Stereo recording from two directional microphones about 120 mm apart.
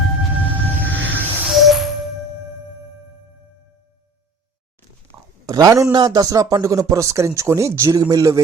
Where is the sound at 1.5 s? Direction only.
Centre (ahead or behind).